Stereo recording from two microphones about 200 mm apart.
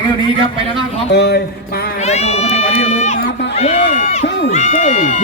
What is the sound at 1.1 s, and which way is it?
Mantra, 55° left (ahead or behind).